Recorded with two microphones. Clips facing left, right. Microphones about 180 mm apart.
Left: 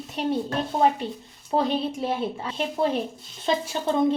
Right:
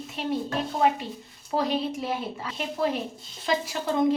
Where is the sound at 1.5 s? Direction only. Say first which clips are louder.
Left 2 dB; 25° left (ahead or behind).